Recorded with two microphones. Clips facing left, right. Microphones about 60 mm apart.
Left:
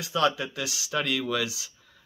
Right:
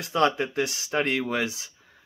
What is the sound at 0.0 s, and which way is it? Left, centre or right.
Speech, right.